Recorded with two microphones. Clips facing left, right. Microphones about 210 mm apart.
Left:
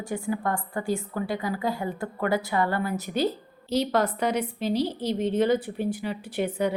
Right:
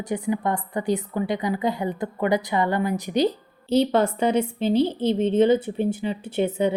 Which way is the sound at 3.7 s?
30° right (ahead or behind).